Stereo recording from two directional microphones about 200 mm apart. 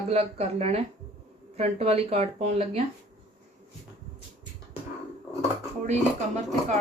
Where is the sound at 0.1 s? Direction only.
30° right (ahead or behind).